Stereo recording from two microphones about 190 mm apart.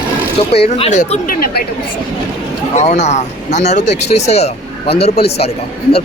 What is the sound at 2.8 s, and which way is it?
Speech, 35° left (ahead or behind).